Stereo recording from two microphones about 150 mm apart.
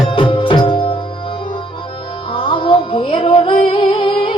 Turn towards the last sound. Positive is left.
turn(degrees=35)  # may be behind; listen again after turning